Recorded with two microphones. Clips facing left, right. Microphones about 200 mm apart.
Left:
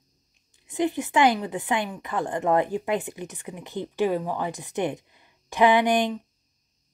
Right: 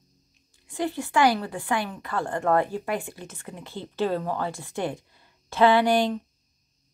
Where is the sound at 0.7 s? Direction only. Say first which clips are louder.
Left 3 dB; 20° left (ahead or behind).